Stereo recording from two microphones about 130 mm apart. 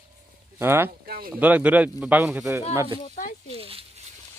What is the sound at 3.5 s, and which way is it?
Speech, 45° right (ahead or behind).